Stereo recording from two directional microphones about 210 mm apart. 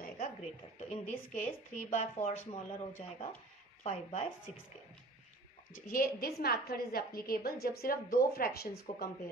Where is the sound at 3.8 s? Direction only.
30° left (ahead or behind).